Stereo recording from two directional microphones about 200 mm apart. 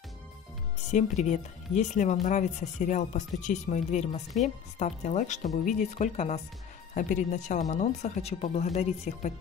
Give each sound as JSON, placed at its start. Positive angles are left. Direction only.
{"t": 0.9, "sound": "speech", "side_deg": 35}